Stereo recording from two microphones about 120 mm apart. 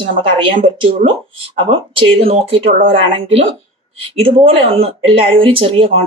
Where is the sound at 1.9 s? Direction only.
55° right (ahead or behind).